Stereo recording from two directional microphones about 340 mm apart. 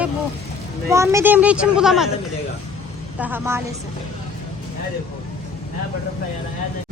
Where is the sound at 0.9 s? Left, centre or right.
Centre.